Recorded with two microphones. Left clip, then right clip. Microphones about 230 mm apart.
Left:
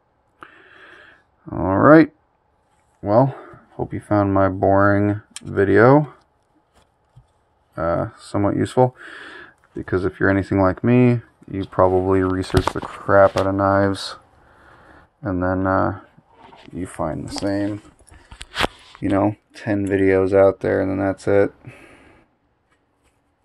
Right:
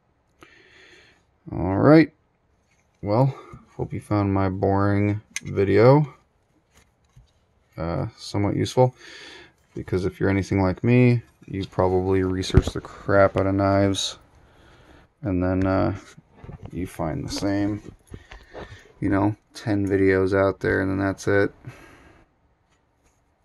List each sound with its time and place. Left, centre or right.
0.4 s a sound: centre
3.1 s speech: centre
7.7 s speech: centre
13.0 s speech: centre
16.9 s speech: centre
18.9 s speech: centre
20.7 s speech: centre
21.6 s a sound: right